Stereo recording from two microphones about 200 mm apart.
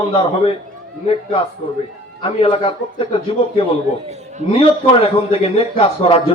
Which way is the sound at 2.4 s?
25° left (ahead or behind).